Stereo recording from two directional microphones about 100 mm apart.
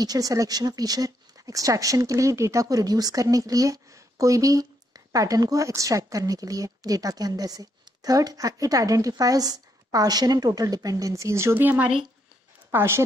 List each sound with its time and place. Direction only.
0.0 s a woman's voice: 40° right (ahead or behind)